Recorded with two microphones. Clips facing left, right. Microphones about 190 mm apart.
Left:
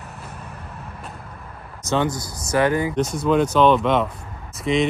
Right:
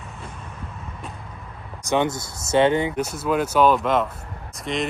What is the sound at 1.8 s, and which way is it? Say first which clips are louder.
Speech: even; 15° right (ahead or behind).